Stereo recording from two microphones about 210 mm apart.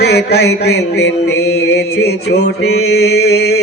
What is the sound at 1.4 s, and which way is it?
Speech, 90° left.